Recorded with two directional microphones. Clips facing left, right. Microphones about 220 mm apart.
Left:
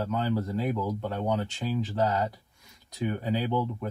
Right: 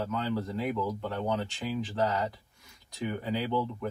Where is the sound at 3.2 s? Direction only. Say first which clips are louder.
Left 1 dB; 20° left (ahead or behind).